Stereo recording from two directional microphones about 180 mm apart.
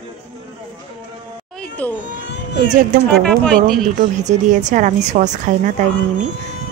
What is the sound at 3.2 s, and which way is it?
Speech, 5° left (ahead or behind).